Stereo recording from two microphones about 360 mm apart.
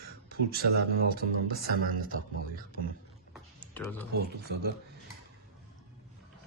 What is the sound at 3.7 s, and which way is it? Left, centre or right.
Speech, centre.